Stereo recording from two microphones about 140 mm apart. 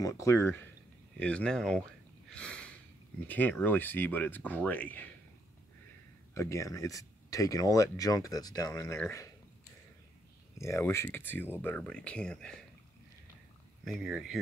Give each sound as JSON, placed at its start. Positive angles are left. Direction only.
{"t": 0.0, "sound": "speech", "side_deg": 20}
{"t": 6.3, "sound": "speech", "side_deg": 20}
{"t": 8.8, "sound": "speech", "side_deg": 15}
{"t": 10.6, "sound": "speech", "side_deg": 20}
{"t": 13.8, "sound": "speech", "side_deg": -5}